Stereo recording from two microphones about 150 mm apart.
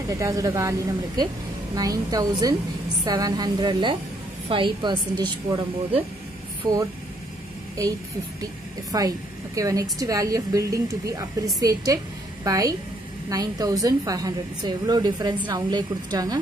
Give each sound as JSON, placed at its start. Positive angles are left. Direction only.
{"t": 0.1, "sound": "a woman's voice", "side_deg": -20}
{"t": 6.6, "sound": "speech", "side_deg": -15}
{"t": 8.9, "sound": "a woman's voice", "side_deg": -25}